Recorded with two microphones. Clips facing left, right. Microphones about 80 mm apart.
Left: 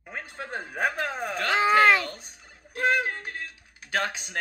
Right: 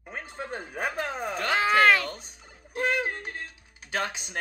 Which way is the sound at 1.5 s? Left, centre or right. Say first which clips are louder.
Left 1 dB; left.